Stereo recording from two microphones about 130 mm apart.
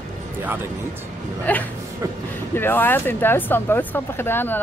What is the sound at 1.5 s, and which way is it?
Speech, 10° left (ahead or behind).